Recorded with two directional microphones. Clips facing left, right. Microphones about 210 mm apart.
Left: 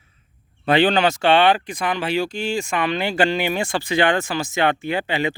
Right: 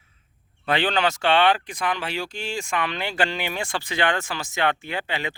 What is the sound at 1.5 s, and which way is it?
Speech, 10° left (ahead or behind).